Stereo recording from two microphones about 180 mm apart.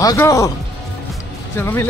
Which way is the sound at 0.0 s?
20° left (ahead or behind).